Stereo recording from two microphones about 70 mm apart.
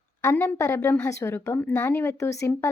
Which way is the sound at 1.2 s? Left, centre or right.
Left.